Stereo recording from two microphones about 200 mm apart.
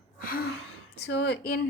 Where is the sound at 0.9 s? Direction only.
60° left (ahead or behind).